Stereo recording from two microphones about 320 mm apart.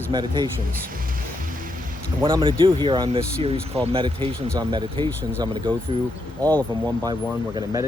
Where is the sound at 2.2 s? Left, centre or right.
Centre.